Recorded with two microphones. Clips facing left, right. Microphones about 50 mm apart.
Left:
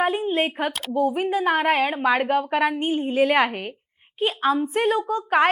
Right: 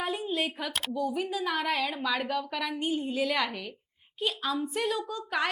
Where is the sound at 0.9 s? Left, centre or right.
Left.